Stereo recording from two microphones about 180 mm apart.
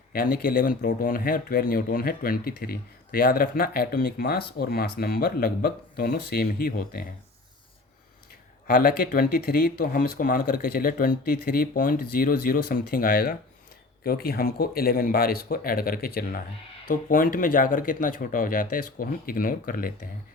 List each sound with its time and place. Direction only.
0.1 s speech: 55° left (ahead or behind)
8.6 s speech: 50° left (ahead or behind)